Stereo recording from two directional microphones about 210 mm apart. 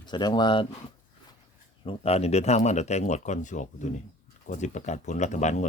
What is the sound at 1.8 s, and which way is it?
Speech, 30° left (ahead or behind).